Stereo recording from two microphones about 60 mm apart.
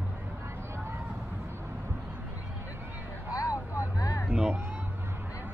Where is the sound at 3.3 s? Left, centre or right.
Left.